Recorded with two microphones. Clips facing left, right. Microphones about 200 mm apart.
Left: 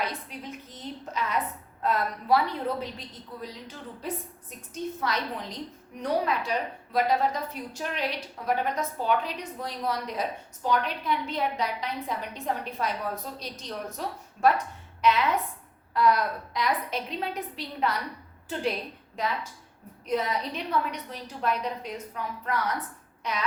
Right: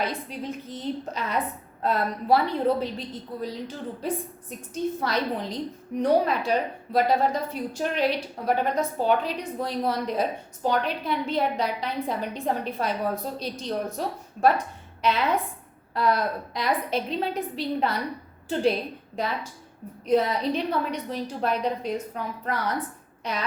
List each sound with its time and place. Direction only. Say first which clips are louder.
0.0 s a woman's voice: right 4 dB; 30° right (ahead or behind)